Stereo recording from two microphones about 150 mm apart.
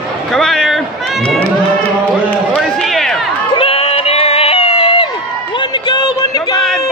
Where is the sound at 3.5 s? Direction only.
40° left (ahead or behind).